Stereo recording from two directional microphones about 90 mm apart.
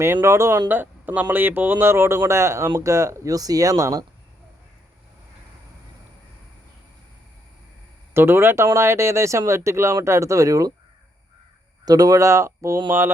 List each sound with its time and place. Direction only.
0.0 s speech: 30° right (ahead or behind)
8.1 s speech: 25° right (ahead or behind)
11.9 s speech: 45° right (ahead or behind)